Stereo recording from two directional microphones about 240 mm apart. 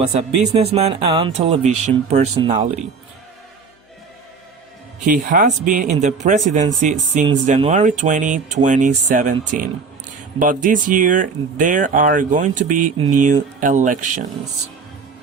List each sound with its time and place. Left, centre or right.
0.1 s speech: right
5.0 s speech: right